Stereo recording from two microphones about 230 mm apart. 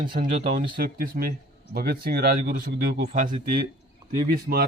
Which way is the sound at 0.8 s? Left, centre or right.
Right.